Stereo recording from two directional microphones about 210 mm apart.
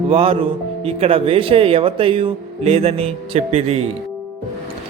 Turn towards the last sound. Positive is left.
turn(degrees=-30)  # may be behind; listen again after turning